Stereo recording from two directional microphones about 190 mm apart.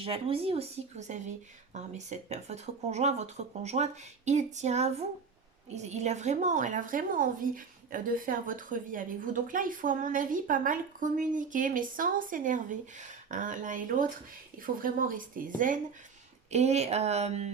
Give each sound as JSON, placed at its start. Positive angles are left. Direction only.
{"t": 0.0, "sound": "a woman's voice", "side_deg": -30}